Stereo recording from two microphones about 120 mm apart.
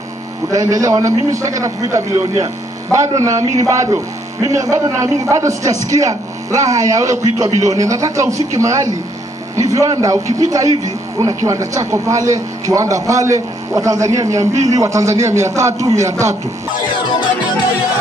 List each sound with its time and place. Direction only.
0.5 s a man's voice: 30° right (ahead or behind)